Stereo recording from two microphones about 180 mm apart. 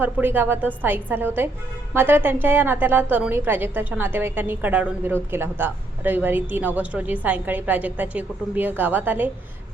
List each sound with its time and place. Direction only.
0.0 s a woman's voice: 10° right (ahead or behind)